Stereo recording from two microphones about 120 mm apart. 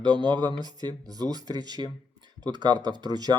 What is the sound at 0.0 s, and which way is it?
Speech, 40° right (ahead or behind).